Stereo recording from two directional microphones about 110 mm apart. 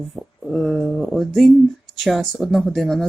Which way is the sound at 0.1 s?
Centre (ahead or behind).